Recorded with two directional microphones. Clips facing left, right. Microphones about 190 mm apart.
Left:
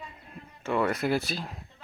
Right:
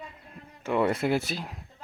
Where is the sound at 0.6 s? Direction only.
20° right (ahead or behind).